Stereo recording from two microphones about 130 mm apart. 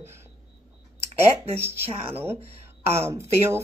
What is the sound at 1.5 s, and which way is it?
Speech, 15° right (ahead or behind).